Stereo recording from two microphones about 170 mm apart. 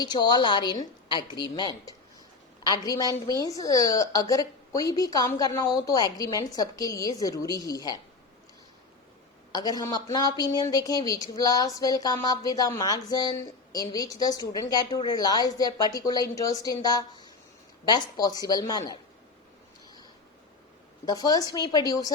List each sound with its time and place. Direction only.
0.0 s speech: 25° left (ahead or behind)
9.5 s speech: 20° left (ahead or behind)
21.0 s speech: 25° left (ahead or behind)